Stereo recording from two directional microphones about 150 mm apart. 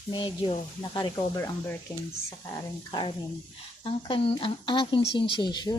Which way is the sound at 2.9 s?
30° left (ahead or behind).